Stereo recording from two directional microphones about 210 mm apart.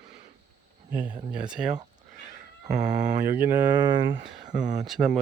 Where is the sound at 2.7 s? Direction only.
35° right (ahead or behind).